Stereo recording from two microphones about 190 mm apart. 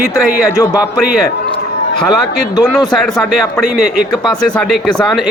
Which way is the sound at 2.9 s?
Centre (ahead or behind).